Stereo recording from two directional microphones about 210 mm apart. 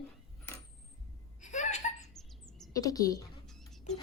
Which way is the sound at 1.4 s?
35° left (ahead or behind).